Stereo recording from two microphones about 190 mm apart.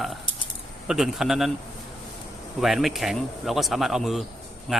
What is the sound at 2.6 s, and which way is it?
Speech, centre (ahead or behind).